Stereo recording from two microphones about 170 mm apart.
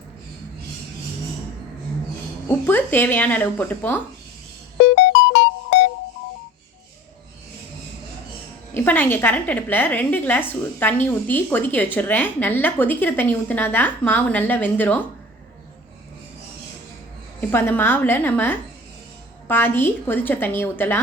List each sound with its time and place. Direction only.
2.6 s a woman's voice: 10° left (ahead or behind)
4.8 s music: 90° left
8.7 s a woman's voice: 10° left (ahead or behind)
17.5 s a woman's voice: 10° left (ahead or behind)